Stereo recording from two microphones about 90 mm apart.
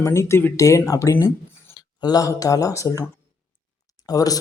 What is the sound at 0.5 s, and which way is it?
Speech, 35° left (ahead or behind).